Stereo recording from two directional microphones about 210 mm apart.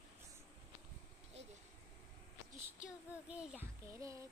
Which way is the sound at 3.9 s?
15° right (ahead or behind).